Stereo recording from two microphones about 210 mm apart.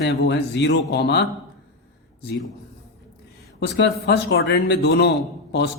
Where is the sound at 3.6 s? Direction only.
55° left (ahead or behind).